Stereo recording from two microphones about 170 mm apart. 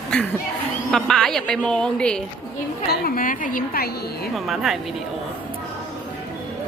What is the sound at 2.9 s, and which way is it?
A woman's voice, 60° left (ahead or behind).